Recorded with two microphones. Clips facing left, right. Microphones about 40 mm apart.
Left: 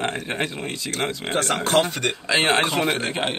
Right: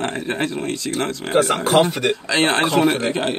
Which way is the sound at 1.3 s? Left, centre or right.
Centre.